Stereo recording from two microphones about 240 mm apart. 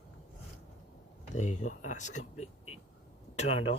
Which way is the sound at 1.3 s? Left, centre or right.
Left.